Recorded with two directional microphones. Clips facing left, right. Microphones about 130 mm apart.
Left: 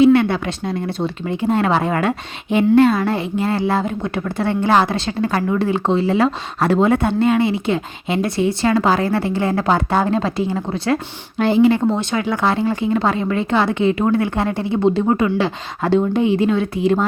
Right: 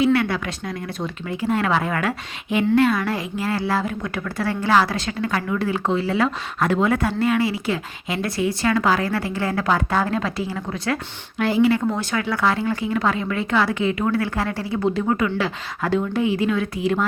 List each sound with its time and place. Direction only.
0.0 s a woman's voice: 25° left (ahead or behind)